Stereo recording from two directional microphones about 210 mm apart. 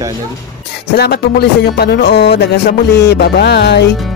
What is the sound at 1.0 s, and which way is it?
Speech, 50° left (ahead or behind).